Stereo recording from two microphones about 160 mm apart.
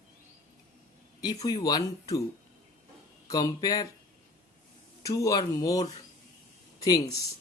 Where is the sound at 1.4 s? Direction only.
25° left (ahead or behind).